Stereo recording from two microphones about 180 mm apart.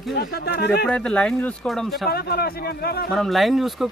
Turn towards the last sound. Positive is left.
turn(degrees=0)  # may be behind; listen again after turning